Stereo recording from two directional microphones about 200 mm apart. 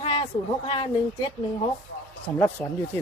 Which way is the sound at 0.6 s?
25° left (ahead or behind).